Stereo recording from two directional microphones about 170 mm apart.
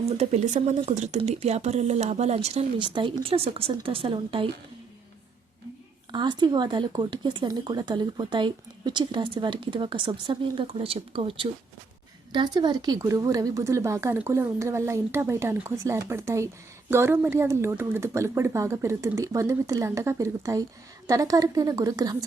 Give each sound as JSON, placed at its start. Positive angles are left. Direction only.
{"t": 0.0, "sound": "speech", "side_deg": -40}
{"t": 6.1, "sound": "a woman's voice", "side_deg": -25}